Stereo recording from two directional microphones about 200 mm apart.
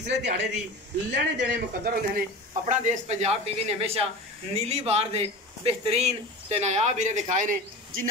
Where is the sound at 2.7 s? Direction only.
35° right (ahead or behind).